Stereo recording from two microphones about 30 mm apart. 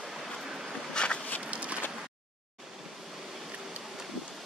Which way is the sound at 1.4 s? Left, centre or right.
Right.